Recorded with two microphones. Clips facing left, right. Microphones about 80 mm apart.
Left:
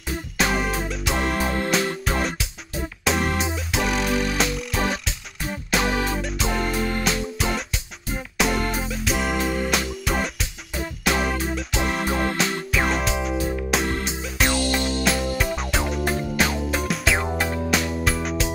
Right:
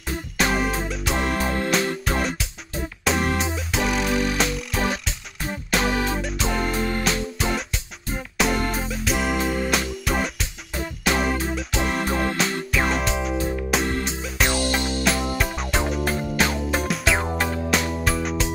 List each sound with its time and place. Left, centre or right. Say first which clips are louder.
0.4 s music: right 1 dB; centre
14.5 s music: left 1 dB; right
15.3 s music: even; centre